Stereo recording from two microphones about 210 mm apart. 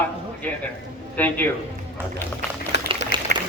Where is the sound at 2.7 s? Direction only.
55° left (ahead or behind).